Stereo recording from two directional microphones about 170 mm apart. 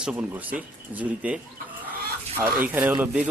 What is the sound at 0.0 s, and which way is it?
A man's voice, 10° right (ahead or behind).